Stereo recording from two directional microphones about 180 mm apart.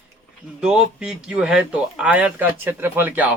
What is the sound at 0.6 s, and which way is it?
Speech, 5° right (ahead or behind).